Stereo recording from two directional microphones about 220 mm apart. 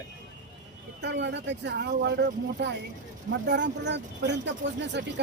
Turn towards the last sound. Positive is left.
turn(degrees=-55)  # may be behind; listen again after turning